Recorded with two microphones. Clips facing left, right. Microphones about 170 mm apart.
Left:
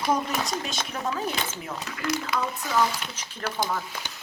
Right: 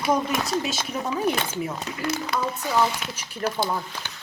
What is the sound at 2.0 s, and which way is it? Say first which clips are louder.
Speech: right 1 dB; 30° right (ahead or behind).